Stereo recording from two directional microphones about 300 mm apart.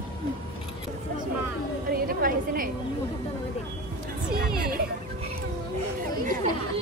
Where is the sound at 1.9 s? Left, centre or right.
Right.